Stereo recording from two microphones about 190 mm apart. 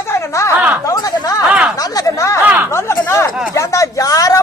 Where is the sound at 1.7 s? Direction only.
20° left (ahead or behind).